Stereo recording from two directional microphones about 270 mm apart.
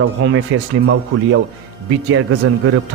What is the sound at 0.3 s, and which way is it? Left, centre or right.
A man's voice, right.